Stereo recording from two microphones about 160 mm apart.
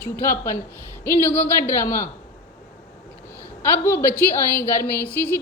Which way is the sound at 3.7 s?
15° left (ahead or behind).